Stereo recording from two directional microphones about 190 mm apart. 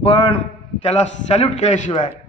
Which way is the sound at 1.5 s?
40° left (ahead or behind).